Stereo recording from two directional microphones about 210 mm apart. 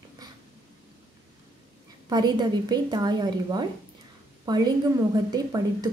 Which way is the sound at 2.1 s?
20° right (ahead or behind).